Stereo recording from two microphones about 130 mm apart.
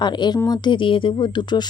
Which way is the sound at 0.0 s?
35° left (ahead or behind).